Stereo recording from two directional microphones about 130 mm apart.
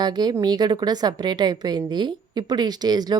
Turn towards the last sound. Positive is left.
turn(degrees=-30)  # may be behind; listen again after turning